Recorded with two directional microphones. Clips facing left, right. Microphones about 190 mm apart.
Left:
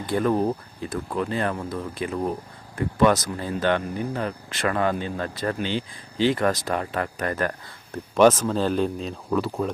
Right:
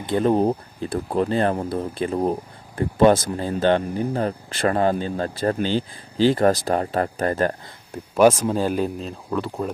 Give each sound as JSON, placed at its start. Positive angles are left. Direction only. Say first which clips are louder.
{"t": 0.0, "sound": "speech", "louder": "right 3 dB", "side_deg": -25}
{"t": 8.1, "sound": "speech", "louder": "right 1 dB", "side_deg": -10}